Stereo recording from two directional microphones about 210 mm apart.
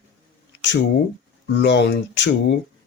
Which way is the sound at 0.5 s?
60° left (ahead or behind).